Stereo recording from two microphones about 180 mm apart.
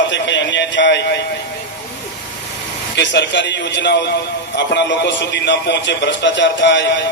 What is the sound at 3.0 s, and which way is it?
A man's voice, 80° left.